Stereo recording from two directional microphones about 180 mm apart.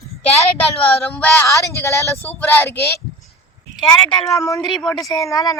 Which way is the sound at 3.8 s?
25° left (ahead or behind).